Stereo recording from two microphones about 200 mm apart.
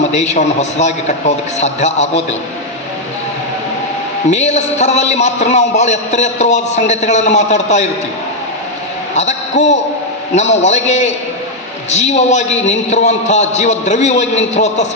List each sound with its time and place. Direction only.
0.0 s a man's voice: 35° left (ahead or behind)
4.3 s a man's voice: 35° left (ahead or behind)
9.1 s a man's voice: 35° left (ahead or behind)